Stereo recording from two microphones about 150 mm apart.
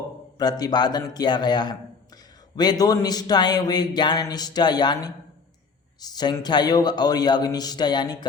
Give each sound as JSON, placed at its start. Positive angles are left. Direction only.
{"t": 0.3, "sound": "speech", "side_deg": 25}